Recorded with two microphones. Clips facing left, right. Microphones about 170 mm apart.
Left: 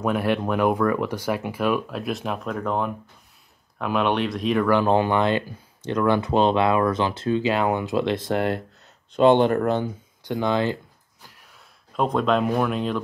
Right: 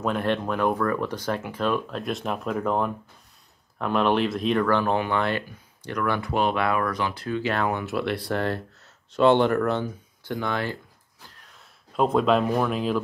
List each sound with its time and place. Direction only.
0.0 s speech: 10° left (ahead or behind)
4.6 s speech: 10° left (ahead or behind)
4.9 s speech: 25° left (ahead or behind)
11.9 s speech: centre (ahead or behind)